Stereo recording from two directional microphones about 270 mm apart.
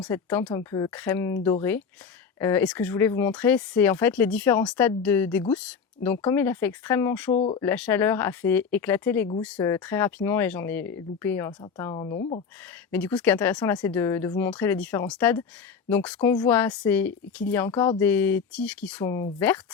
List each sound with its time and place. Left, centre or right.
0.0 s speech: centre
2.4 s speech: centre
7.3 s speech: left
7.6 s speech: centre